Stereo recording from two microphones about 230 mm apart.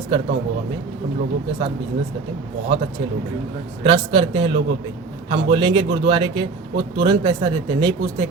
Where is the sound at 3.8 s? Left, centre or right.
Right.